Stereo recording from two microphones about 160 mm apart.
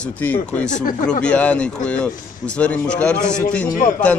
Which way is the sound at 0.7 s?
55° left (ahead or behind).